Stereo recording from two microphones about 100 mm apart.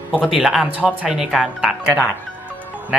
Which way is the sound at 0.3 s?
Centre (ahead or behind).